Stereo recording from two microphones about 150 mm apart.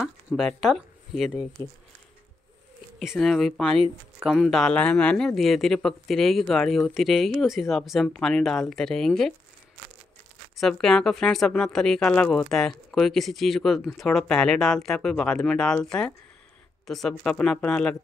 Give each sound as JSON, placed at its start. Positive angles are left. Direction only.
{"t": 0.0, "sound": "speech", "side_deg": 0}
{"t": 1.6, "sound": "speech", "side_deg": 25}
{"t": 3.0, "sound": "speech", "side_deg": 0}
{"t": 10.6, "sound": "speech", "side_deg": 5}